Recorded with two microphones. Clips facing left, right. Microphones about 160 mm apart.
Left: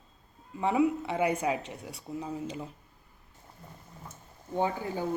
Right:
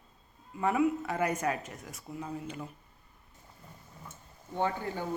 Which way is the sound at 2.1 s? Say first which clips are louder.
Left 3 dB; 25° left (ahead or behind).